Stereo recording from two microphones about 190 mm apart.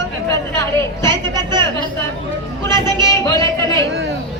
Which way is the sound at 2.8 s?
25° right (ahead or behind).